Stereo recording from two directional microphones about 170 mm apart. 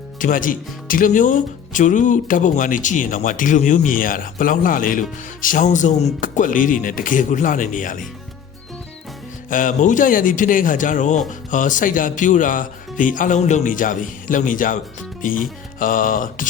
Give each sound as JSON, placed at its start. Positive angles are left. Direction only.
{"t": 0.2, "sound": "speech", "side_deg": 50}
{"t": 9.5, "sound": "speech", "side_deg": 50}